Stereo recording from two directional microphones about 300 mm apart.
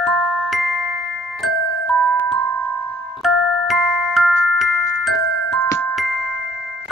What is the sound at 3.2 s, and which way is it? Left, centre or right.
Glockenspiel, centre.